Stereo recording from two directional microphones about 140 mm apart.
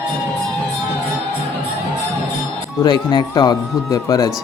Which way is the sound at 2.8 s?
30° left (ahead or behind).